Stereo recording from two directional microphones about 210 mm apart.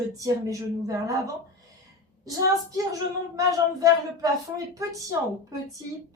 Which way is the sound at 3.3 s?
15° right (ahead or behind).